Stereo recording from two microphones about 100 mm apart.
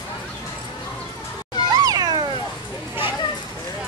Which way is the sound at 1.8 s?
45° right (ahead or behind).